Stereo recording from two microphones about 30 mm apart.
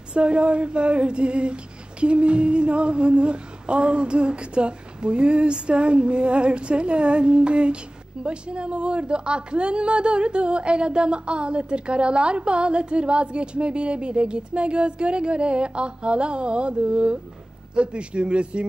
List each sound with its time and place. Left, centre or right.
0.1 s female singing: right